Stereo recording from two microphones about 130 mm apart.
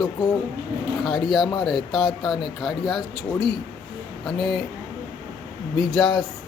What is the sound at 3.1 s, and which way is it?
Speech, 40° right (ahead or behind).